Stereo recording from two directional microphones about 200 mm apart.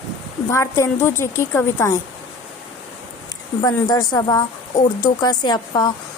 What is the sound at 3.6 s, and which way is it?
Speech, 15° left (ahead or behind).